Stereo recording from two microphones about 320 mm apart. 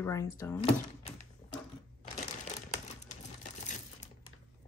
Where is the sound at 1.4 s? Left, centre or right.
Left.